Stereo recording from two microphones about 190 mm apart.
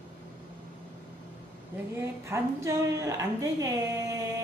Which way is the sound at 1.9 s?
15° right (ahead or behind).